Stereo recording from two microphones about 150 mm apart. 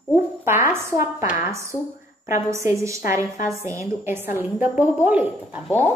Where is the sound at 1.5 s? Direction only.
20° right (ahead or behind).